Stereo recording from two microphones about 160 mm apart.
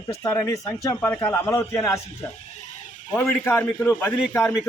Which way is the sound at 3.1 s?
15° left (ahead or behind).